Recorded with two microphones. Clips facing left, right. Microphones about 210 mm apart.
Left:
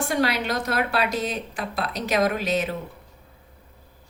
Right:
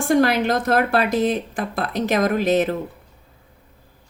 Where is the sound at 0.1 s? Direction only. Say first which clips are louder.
Right 9 dB; 50° right (ahead or behind).